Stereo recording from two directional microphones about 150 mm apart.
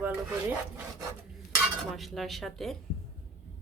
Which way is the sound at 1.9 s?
Centre (ahead or behind).